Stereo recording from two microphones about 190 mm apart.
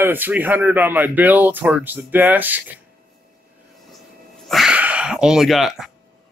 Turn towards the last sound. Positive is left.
turn(degrees=0)  # may be behind; listen again after turning